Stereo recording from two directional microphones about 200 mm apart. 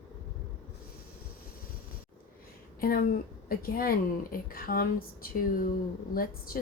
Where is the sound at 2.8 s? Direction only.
45° left (ahead or behind).